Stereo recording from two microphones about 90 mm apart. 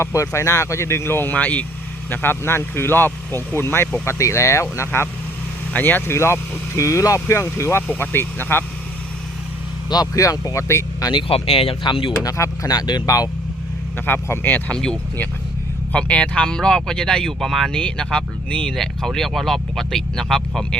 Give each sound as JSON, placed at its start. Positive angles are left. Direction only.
{"t": 0.0, "sound": "speech", "side_deg": 35}
{"t": 9.9, "sound": "speech", "side_deg": 45}
{"t": 11.1, "sound": "speech", "side_deg": 80}
{"t": 12.2, "sound": "speech", "side_deg": 45}
{"t": 14.1, "sound": "speech", "side_deg": 20}
{"t": 14.8, "sound": "speech", "side_deg": 10}